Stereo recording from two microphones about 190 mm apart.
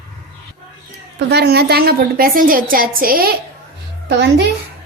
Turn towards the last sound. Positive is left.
turn(degrees=-65)  # may be behind; listen again after turning